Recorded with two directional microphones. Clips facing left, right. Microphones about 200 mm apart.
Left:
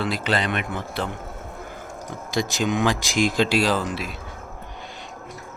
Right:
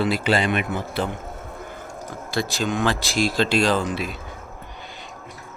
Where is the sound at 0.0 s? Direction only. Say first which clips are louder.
Right 3 dB; 5° right (ahead or behind).